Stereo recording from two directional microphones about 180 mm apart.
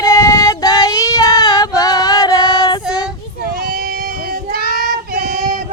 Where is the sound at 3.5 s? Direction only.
55° right (ahead or behind).